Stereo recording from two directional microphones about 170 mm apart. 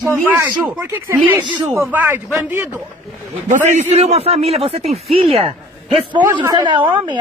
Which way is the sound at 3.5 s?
45° right (ahead or behind).